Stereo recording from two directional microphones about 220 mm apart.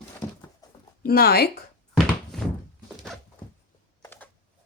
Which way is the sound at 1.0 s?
45° left (ahead or behind).